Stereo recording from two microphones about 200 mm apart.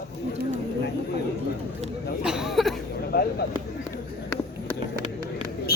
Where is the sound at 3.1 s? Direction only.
50° left (ahead or behind).